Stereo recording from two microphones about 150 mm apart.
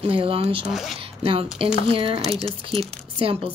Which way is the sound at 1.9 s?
35° right (ahead or behind).